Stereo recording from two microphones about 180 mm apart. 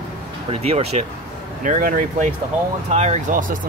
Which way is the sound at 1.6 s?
45° right (ahead or behind).